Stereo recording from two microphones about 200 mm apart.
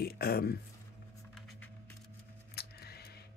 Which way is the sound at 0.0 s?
50° left (ahead or behind).